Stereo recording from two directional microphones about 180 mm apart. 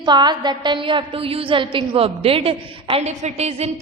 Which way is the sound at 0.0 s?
25° right (ahead or behind).